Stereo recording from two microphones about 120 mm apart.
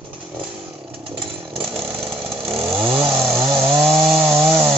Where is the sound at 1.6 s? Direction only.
5° right (ahead or behind).